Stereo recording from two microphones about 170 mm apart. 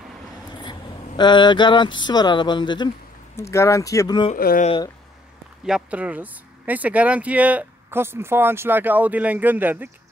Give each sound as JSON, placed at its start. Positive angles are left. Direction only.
{"t": 0.6, "sound": "speech", "side_deg": 25}
{"t": 4.4, "sound": "speech", "side_deg": 60}
{"t": 5.7, "sound": "speech", "side_deg": -5}